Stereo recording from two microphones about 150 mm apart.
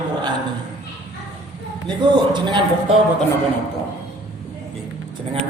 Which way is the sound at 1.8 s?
30° right (ahead or behind).